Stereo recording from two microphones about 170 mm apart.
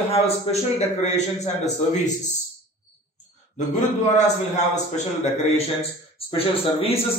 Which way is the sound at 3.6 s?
45° left (ahead or behind).